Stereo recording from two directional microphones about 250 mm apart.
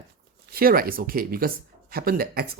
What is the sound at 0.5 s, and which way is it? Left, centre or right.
Speech, right.